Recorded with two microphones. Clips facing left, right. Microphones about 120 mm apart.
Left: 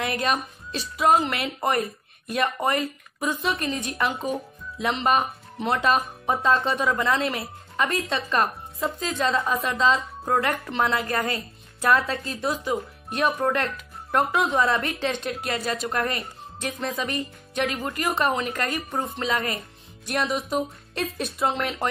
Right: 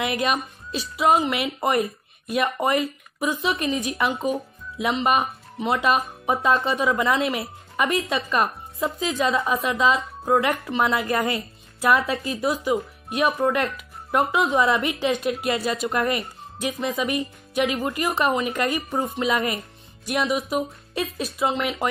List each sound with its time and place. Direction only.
0.0 s speech: 10° right (ahead or behind)
11.0 s speech: 20° right (ahead or behind)
11.8 s speech: 5° right (ahead or behind)